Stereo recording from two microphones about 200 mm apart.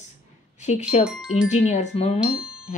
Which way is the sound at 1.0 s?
5° right (ahead or behind).